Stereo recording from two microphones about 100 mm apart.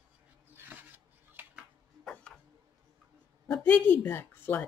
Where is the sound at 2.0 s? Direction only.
10° left (ahead or behind).